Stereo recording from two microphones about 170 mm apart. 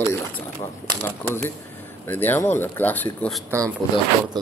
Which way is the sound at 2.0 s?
10° left (ahead or behind).